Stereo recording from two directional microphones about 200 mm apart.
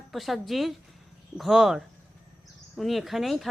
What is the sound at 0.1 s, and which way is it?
Speech, centre (ahead or behind).